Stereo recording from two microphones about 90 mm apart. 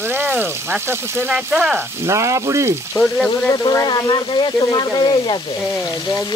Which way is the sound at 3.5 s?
40° left (ahead or behind).